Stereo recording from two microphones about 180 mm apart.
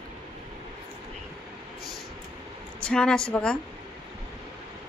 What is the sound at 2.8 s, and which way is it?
Speech, 5° left (ahead or behind).